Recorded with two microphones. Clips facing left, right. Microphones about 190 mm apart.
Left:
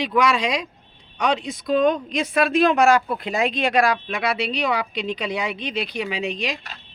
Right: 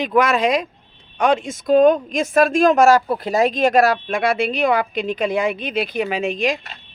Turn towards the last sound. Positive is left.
turn(degrees=-50)  # may be behind; listen again after turning